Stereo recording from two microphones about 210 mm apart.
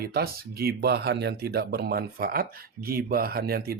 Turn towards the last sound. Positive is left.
turn(degrees=-50)  # may be behind; listen again after turning